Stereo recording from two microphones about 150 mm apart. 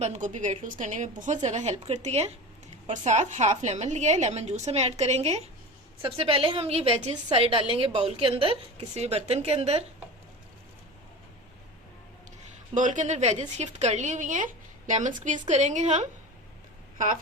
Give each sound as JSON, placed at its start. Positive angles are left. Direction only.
{"t": 0.0, "sound": "a woman's voice", "side_deg": -50}
{"t": 12.7, "sound": "a woman's voice", "side_deg": -55}